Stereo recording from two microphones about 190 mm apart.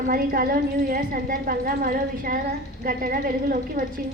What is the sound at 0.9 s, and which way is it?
A woman's voice, 50° right (ahead or behind).